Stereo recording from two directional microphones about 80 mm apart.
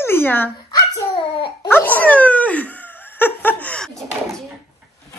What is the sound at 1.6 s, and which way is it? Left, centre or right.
Dog, left.